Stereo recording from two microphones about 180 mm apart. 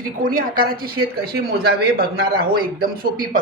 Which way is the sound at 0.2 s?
50° right (ahead or behind).